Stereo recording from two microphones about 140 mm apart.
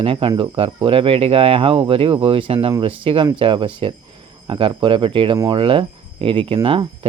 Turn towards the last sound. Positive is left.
turn(degrees=-40)  # may be behind; listen again after turning